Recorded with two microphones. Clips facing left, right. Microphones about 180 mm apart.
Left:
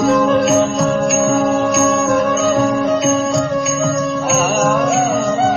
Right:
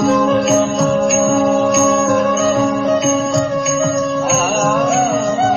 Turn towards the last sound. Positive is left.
turn(degrees=0)  # may be behind; listen again after turning